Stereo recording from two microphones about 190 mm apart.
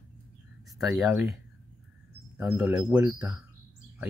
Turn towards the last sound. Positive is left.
turn(degrees=-10)  # may be behind; listen again after turning